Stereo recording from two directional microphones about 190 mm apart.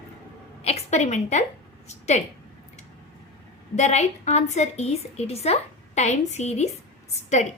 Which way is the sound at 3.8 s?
35° left (ahead or behind).